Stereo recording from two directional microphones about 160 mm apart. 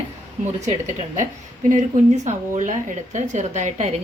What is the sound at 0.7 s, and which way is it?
Speech, 50° right (ahead or behind).